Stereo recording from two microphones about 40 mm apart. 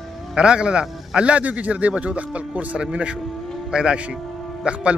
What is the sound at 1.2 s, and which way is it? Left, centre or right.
Speech, right.